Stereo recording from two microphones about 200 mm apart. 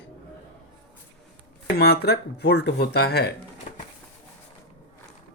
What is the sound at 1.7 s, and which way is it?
Speech, 55° left (ahead or behind).